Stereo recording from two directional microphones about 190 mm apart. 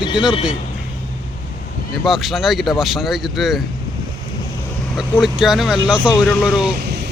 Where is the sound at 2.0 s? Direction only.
Centre (ahead or behind).